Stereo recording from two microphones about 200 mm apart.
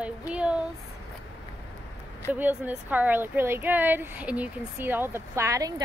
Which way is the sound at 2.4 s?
10° right (ahead or behind).